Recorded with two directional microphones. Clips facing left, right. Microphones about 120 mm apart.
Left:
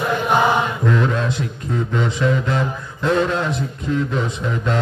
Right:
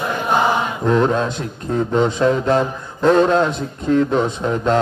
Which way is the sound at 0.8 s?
30° right (ahead or behind).